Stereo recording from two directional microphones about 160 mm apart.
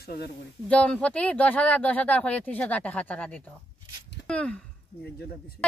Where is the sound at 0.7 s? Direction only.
5° left (ahead or behind).